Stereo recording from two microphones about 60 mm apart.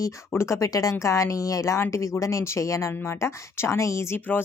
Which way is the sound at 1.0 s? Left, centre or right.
Left.